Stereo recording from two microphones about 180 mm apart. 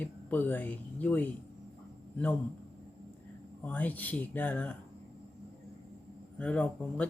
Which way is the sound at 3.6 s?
10° left (ahead or behind).